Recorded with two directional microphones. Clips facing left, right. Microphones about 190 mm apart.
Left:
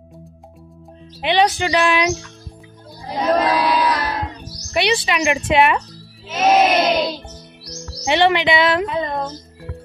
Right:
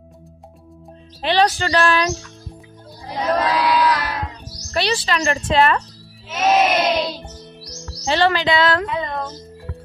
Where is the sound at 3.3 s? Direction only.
20° left (ahead or behind).